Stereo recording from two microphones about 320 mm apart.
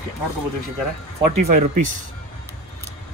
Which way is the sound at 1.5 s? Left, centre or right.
Right.